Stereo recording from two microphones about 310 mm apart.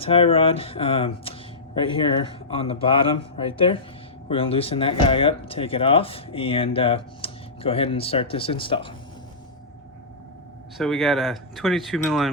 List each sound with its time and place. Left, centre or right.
0.0 s speech: centre
10.8 s speech: centre